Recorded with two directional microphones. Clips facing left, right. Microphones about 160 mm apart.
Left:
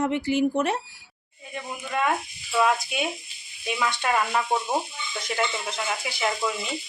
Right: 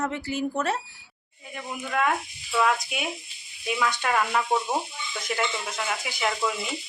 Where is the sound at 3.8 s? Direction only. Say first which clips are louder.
Left 1 dB; 10° left (ahead or behind).